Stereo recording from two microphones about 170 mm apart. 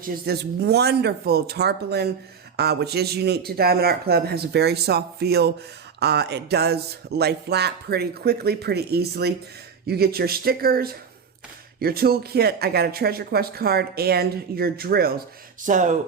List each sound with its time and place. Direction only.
0.0 s speech: 60° right (ahead or behind)
15.6 s speech: 45° right (ahead or behind)